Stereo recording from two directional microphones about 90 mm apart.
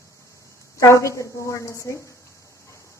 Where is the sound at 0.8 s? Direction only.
35° left (ahead or behind).